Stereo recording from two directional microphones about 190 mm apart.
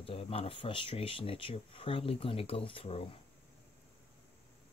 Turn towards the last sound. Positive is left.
turn(degrees=30)  # may be behind; listen again after turning